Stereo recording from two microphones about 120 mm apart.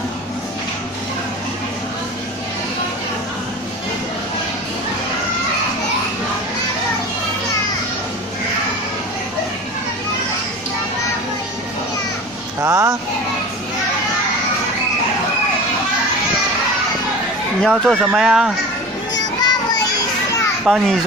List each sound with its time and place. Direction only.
12.6 s a sound: 25° right (ahead or behind)
17.6 s speech: centre (ahead or behind)
19.4 s children playing: 35° left (ahead or behind)
20.6 s speech: 5° right (ahead or behind)